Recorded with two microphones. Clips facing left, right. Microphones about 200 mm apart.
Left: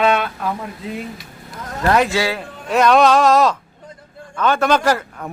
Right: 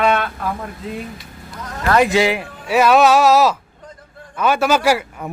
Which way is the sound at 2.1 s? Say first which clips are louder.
Right 4 dB; 15° right (ahead or behind).